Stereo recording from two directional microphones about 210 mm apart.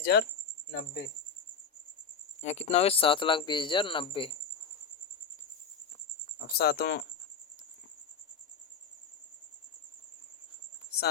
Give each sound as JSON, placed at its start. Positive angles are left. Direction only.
{"t": 0.0, "sound": "speech", "side_deg": 50}
{"t": 2.4, "sound": "speech", "side_deg": 30}
{"t": 6.5, "sound": "speech", "side_deg": 50}